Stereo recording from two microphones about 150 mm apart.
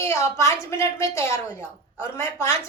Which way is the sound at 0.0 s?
20° left (ahead or behind).